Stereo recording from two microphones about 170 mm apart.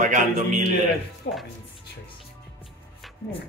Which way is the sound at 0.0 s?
45° right (ahead or behind).